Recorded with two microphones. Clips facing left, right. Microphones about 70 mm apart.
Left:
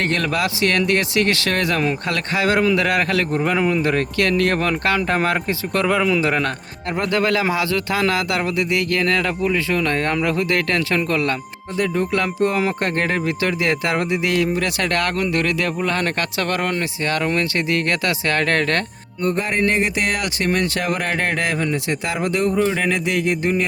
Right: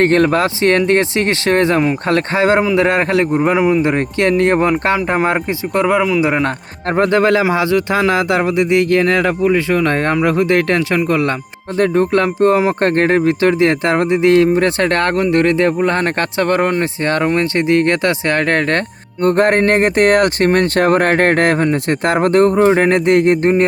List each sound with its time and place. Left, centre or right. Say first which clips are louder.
0.0 s speech: right 9 dB; right; by 6.4 s centre
6.8 s speech: right 7 dB; right
11.8 s speech: right 7 dB; right
19.2 s speech: right 8 dB; right